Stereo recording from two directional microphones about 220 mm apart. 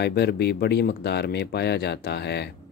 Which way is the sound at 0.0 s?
50° left (ahead or behind).